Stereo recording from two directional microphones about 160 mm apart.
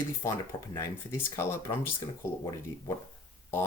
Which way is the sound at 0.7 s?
20° left (ahead or behind).